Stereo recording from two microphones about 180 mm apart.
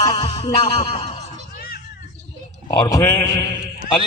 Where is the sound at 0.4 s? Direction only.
35° left (ahead or behind).